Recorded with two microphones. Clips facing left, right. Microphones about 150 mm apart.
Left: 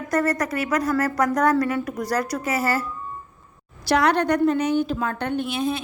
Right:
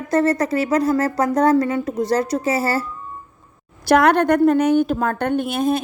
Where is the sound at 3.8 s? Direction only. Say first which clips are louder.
Right 5 dB; 50° right (ahead or behind).